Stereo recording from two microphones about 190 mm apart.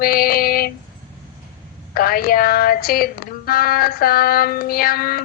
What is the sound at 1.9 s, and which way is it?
Child singing, 50° left (ahead or behind).